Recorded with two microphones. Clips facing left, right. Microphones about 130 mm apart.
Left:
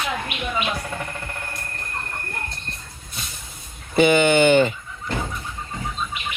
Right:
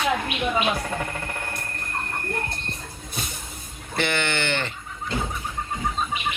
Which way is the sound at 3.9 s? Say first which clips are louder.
Left 10 dB; 15° left (ahead or behind).